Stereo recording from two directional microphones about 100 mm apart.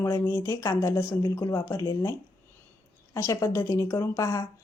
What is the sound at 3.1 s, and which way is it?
A woman's voice, 30° left (ahead or behind).